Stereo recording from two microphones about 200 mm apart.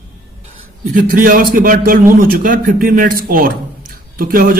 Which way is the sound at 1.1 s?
45° right (ahead or behind).